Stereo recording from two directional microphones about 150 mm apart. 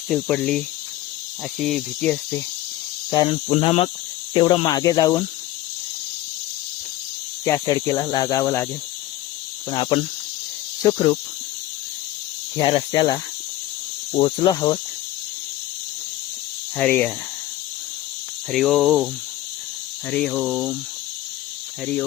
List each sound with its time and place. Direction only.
0.1 s speech: 5° left (ahead or behind)
3.1 s speech: 25° left (ahead or behind)
3.5 s cricket: 40° left (ahead or behind)
4.4 s speech: 30° left (ahead or behind)
7.4 s speech: 20° left (ahead or behind)
9.6 s cricket: 30° left (ahead or behind)
10.8 s speech: 20° left (ahead or behind)
12.5 s cricket: 30° left (ahead or behind)
14.2 s speech: 30° left (ahead or behind)
16.7 s cricket: 10° left (ahead or behind)
18.5 s speech: centre (ahead or behind)
20.1 s cricket: 5° left (ahead or behind)